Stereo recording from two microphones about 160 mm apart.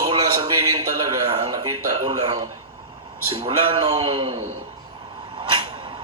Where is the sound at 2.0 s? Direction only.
40° right (ahead or behind).